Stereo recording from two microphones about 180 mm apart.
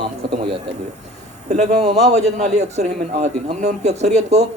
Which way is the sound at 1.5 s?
40° right (ahead or behind).